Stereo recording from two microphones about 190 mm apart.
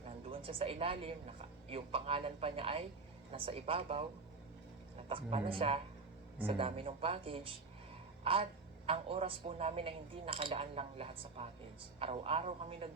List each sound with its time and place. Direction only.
0.0 s speech: 30° right (ahead or behind)
5.0 s a woman's voice: 30° right (ahead or behind)